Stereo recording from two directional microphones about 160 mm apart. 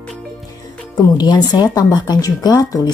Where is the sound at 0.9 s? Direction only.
25° left (ahead or behind).